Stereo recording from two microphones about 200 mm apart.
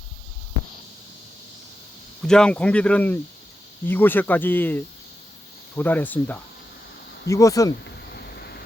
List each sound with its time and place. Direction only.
2.2 s speech: 5° left (ahead or behind)
8.1 s vehicle: 55° left (ahead or behind)